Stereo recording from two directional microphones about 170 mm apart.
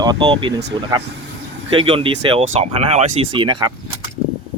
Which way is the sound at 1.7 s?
30° right (ahead or behind).